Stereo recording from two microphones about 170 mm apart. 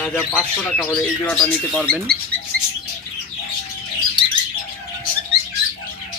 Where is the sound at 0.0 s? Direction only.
10° left (ahead or behind).